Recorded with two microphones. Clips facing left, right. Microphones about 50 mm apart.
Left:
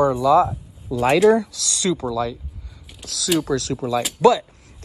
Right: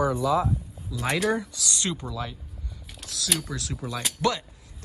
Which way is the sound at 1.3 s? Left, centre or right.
Left.